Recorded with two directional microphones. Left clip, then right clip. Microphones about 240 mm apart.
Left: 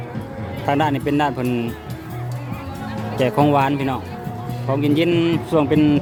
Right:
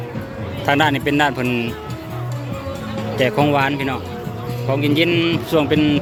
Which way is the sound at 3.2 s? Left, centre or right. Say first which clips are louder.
Even; centre.